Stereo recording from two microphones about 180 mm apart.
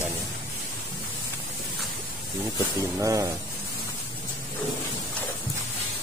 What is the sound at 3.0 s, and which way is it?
Speech, 15° right (ahead or behind).